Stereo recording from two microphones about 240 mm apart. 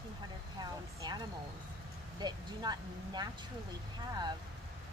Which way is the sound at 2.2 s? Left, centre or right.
Centre.